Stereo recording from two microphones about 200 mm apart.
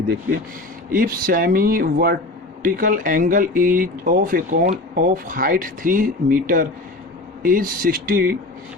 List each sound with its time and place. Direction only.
0.9 s speech: 45° right (ahead or behind)